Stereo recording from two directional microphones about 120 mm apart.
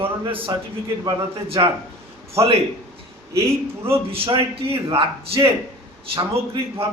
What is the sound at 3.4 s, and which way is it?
Speech, 20° right (ahead or behind).